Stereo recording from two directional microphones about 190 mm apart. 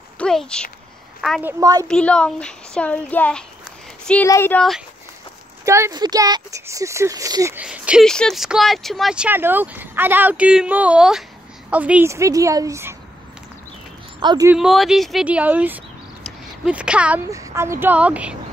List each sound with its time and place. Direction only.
0.2 s speech: 5° left (ahead or behind)
1.4 s a woman's voice: 20° right (ahead or behind)
1.9 s speech: 5° left (ahead or behind)
5.7 s speech: 20° right (ahead or behind)
7.6 s speech: 5° right (ahead or behind)
14.2 s a woman's voice: 20° right (ahead or behind)
14.5 s speech: centre (ahead or behind)
16.3 s a sound: 5° right (ahead or behind)
17.3 s speech: 15° right (ahead or behind)